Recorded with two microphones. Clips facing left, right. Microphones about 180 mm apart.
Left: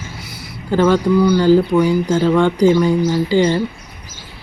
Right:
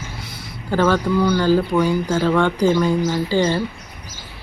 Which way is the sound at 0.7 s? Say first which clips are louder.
Left 4 dB; 15° left (ahead or behind).